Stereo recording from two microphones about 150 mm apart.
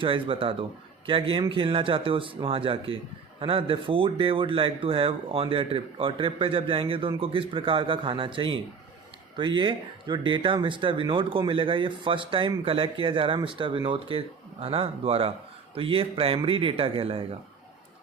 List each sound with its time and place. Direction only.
0.0 s speech: 35° right (ahead or behind)